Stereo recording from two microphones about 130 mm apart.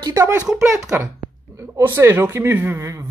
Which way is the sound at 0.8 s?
20° right (ahead or behind).